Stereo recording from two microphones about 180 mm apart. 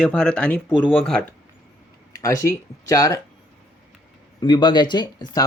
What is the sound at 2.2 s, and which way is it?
Speech, 15° left (ahead or behind).